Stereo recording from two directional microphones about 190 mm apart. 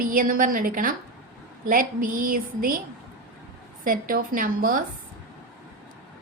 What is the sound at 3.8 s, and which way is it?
A woman's voice, 45° right (ahead or behind).